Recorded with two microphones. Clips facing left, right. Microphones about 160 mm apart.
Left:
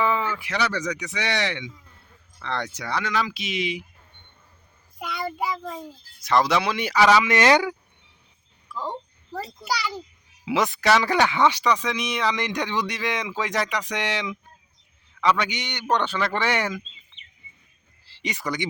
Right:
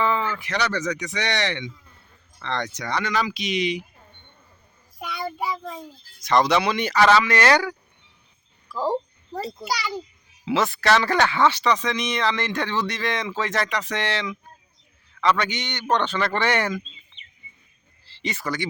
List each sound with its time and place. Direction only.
0.0 s speech: 10° left (ahead or behind)
4.9 s child singing: centre (ahead or behind)
6.2 s speech: centre (ahead or behind); by 7.8 s 20° left (ahead or behind)
8.7 s a sound: 35° right (ahead or behind)
10.4 s speech: 15° left (ahead or behind)
18.0 s a sound: 10° left (ahead or behind)